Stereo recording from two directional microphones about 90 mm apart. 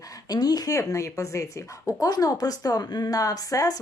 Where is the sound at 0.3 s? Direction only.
45° left (ahead or behind).